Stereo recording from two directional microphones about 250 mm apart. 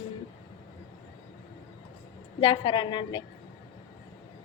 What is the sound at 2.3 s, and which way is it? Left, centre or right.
Speech, centre.